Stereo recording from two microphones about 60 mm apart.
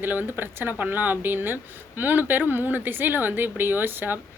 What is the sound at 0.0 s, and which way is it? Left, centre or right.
Speech, right.